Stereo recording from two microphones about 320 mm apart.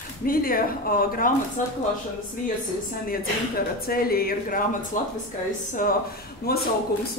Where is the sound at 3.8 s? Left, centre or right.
Left.